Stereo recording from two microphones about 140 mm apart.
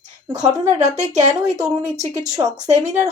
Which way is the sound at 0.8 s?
55° right (ahead or behind).